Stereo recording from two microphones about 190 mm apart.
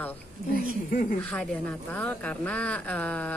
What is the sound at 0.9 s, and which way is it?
Speech, 45° left (ahead or behind).